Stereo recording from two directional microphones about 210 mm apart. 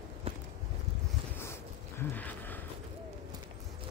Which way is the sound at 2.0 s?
10° left (ahead or behind).